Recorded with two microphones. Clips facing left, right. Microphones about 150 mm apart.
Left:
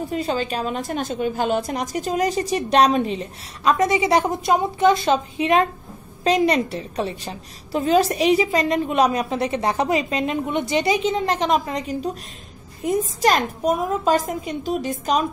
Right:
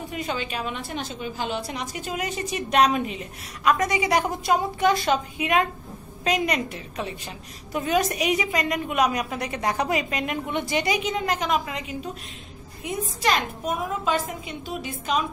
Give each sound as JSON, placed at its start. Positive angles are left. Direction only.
{"t": 0.1, "sound": "a woman's voice", "side_deg": 35}